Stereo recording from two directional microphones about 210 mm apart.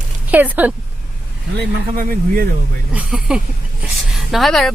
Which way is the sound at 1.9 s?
40° right (ahead or behind).